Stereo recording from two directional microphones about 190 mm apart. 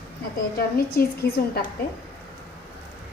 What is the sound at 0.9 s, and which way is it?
Speech, 55° left (ahead or behind).